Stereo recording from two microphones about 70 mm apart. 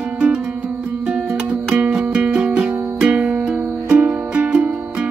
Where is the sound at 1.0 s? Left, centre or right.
Centre.